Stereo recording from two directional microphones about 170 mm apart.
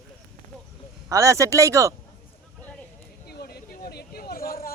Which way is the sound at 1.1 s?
20° right (ahead or behind).